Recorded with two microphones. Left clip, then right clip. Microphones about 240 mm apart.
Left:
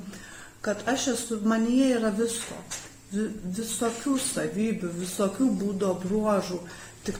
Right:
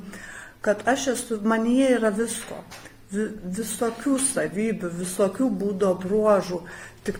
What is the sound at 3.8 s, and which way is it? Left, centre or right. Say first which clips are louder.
Speech: right 3 dB; right.